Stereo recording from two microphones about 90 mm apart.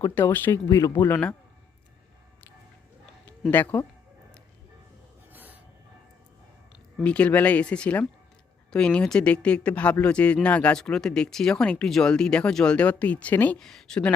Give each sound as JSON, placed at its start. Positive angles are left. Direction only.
{"t": 0.1, "sound": "speech", "side_deg": 25}
{"t": 0.9, "sound": "speech", "side_deg": 25}
{"t": 3.5, "sound": "speech", "side_deg": 20}
{"t": 5.3, "sound": "train", "side_deg": -20}
{"t": 7.0, "sound": "speech", "side_deg": 15}
{"t": 13.6, "sound": "speech", "side_deg": 5}